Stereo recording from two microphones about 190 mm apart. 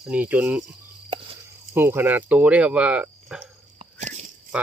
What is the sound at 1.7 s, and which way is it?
Speech, 10° right (ahead or behind).